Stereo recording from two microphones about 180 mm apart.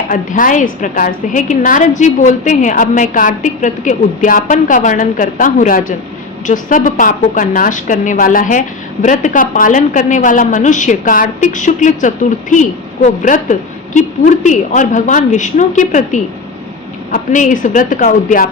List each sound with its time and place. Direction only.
0.1 s a woman's voice: 45° left (ahead or behind)